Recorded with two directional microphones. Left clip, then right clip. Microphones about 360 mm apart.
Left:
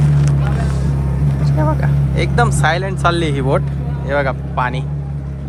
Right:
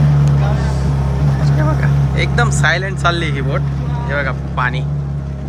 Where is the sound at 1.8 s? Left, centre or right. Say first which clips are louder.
Right 1 dB; centre.